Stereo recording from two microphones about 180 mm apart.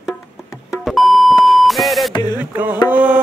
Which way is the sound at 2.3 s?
10° right (ahead or behind).